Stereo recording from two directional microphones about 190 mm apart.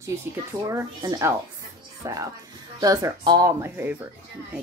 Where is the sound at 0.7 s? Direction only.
20° right (ahead or behind).